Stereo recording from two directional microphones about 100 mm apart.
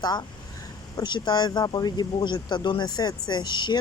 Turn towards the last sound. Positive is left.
turn(degrees=50)  # may be behind; listen again after turning